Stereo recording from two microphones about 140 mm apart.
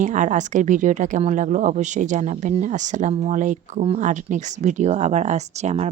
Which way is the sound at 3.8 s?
45° right (ahead or behind).